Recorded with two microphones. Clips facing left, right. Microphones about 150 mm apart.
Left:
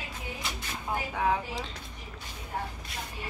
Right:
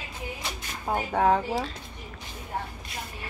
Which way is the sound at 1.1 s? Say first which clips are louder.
Right 7 dB; 50° right (ahead or behind).